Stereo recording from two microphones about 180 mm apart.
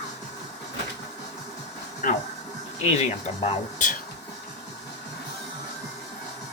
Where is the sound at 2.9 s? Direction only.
35° left (ahead or behind).